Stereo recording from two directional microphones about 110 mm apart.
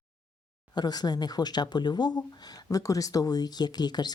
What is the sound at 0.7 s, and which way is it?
Speech, 40° left (ahead or behind).